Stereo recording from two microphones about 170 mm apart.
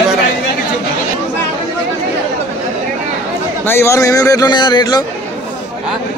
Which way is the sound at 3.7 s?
15° left (ahead or behind).